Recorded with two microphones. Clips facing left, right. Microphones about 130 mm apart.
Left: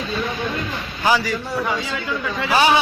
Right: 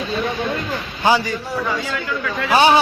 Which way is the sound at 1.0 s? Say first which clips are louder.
Right 2 dB; 25° right (ahead or behind).